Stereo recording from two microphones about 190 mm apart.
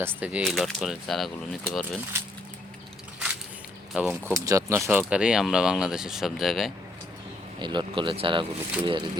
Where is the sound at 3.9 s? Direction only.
10° right (ahead or behind).